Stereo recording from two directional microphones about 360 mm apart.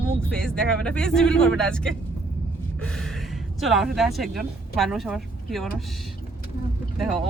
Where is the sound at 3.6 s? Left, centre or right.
Centre.